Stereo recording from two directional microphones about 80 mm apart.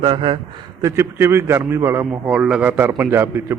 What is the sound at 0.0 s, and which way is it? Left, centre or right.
Speech, right.